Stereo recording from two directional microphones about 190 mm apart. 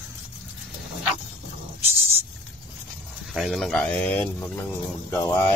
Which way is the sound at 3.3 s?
Centre (ahead or behind).